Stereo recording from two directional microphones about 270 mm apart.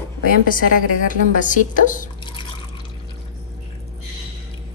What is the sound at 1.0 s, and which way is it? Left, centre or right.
A woman's voice, left.